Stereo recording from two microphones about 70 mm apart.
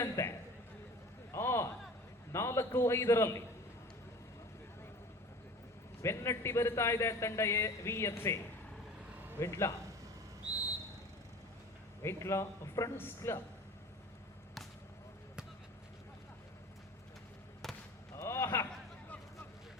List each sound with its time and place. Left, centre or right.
0.0 s a sound: left
2.3 s a man's voice: left
6.0 s a man's voice: left
9.4 s a man's voice: left
12.0 s a man's voice: left
13.0 s a man's voice: left
18.1 s a sound: left